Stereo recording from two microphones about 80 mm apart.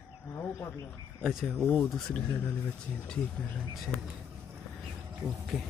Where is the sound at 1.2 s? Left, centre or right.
Centre.